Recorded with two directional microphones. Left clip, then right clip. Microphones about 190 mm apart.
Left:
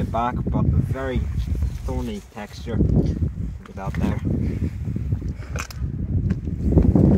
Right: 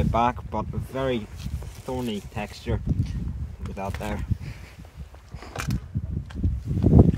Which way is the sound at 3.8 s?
20° right (ahead or behind).